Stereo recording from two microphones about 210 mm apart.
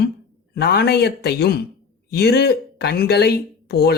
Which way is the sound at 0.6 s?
50° left (ahead or behind).